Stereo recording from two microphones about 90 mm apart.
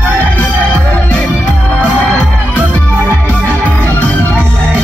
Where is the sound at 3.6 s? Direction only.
15° left (ahead or behind).